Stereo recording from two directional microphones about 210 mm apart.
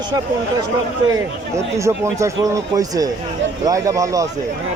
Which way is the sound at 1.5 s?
15° right (ahead or behind).